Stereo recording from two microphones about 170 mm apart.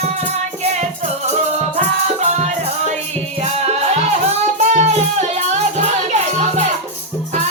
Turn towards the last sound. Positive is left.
turn(degrees=-40)  # may be behind; listen again after turning